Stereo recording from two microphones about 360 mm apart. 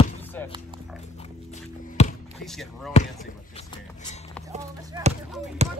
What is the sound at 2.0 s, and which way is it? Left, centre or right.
Basketball bounce, centre.